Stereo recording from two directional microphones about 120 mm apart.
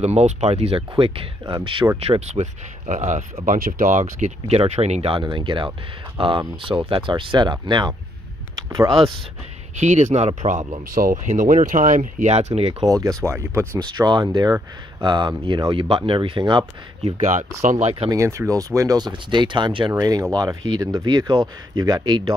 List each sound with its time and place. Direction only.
0.0 s speech: 65° right (ahead or behind); by 1.9 s 45° right (ahead or behind)
2.0 s speech: 60° right (ahead or behind)
5.2 s speech: 40° right (ahead or behind)
9.8 s speech: 80° right; by 12.7 s 60° right (ahead or behind)
12.8 s speech: 30° right (ahead or behind)
13.7 s speech: 35° right (ahead or behind)
17.3 s speech: 90° right
18.1 s speech: 25° right (ahead or behind); by 19.9 s 40° right (ahead or behind)
20.0 s speech: 30° right (ahead or behind)
21.3 s speech: 40° right (ahead or behind)